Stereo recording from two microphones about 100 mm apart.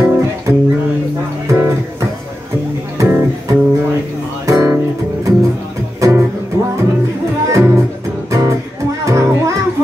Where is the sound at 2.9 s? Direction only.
30° right (ahead or behind).